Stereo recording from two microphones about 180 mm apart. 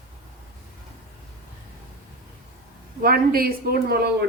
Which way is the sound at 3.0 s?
55° right (ahead or behind).